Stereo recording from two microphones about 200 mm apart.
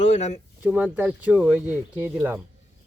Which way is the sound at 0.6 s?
5° right (ahead or behind).